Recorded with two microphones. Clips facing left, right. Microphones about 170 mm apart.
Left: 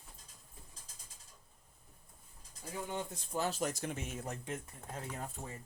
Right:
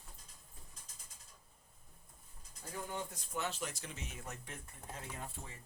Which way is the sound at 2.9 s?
30° left (ahead or behind).